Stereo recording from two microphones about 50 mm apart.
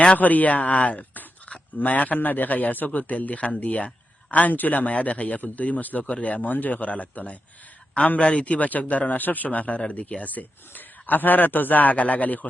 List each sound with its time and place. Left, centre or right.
0.2 s speech: left
8.2 s speech: left